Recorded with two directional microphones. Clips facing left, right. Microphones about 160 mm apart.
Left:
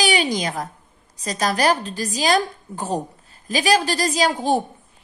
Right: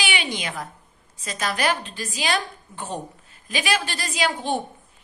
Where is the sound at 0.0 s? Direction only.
40° left (ahead or behind).